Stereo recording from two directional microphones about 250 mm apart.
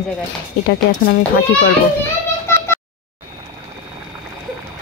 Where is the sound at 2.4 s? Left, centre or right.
Centre.